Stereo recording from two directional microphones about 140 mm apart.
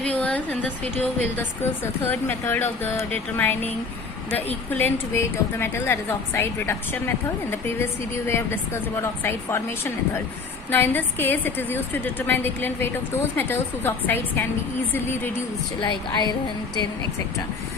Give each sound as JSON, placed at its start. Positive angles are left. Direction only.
{"t": 0.0, "sound": "a sound", "side_deg": 10}
{"t": 1.4, "sound": "a woman's voice", "side_deg": 15}
{"t": 8.3, "sound": "a woman's voice", "side_deg": 20}
{"t": 15.8, "sound": "a woman's voice", "side_deg": 30}